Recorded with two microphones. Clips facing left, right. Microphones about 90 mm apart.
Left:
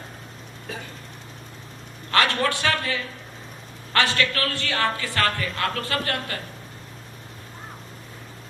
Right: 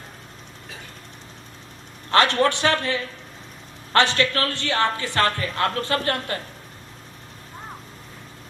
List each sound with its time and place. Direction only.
2.0 s a man's voice: 25° right (ahead or behind)